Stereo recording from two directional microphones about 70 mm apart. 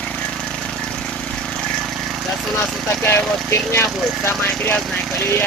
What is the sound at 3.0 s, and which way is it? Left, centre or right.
Speech, left.